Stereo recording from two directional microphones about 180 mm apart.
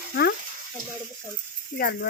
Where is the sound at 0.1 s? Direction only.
60° left (ahead or behind).